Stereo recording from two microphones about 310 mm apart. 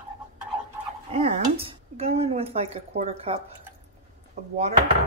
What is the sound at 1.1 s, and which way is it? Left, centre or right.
Speech, centre.